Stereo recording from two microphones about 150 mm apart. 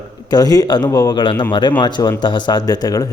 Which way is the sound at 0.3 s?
25° left (ahead or behind).